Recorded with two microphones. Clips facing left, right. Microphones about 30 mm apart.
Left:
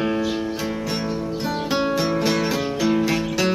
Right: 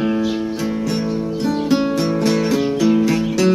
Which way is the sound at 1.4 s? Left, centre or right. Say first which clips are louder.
Right 5 dB; centre.